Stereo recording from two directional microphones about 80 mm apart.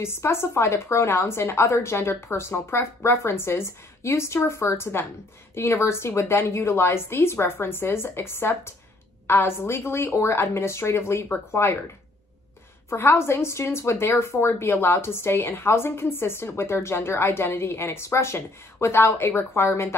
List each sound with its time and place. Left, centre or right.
0.0 s a woman's voice: left
12.9 s a woman's voice: left